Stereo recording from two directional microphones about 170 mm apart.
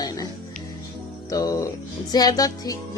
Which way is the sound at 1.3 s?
20° left (ahead or behind).